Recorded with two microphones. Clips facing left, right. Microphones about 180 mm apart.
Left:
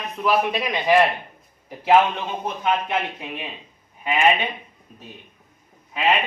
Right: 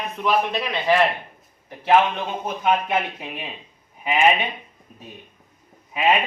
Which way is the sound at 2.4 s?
5° right (ahead or behind).